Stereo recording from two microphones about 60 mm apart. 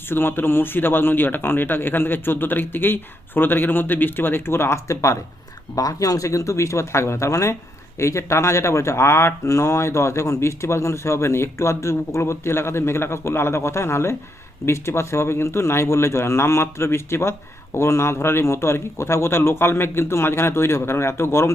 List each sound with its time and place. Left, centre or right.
0.1 s speech: left
5.7 s speech: left